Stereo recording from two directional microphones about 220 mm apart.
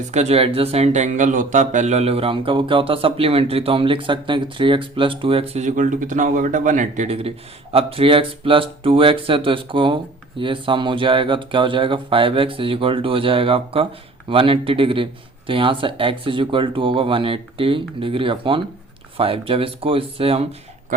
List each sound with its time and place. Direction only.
0.1 s speech: 30° right (ahead or behind)